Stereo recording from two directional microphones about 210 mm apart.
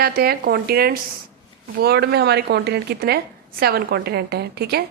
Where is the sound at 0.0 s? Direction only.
45° right (ahead or behind).